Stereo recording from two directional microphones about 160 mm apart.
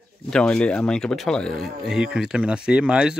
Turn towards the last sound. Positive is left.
turn(degrees=-5)  # may be behind; listen again after turning